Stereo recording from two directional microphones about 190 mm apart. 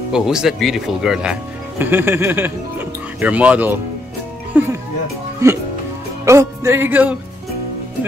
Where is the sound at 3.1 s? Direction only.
5° right (ahead or behind).